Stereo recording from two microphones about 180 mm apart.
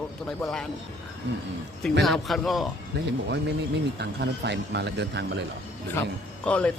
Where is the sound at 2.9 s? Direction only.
70° right (ahead or behind).